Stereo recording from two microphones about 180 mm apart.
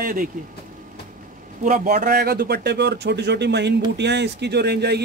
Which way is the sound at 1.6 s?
50° right (ahead or behind).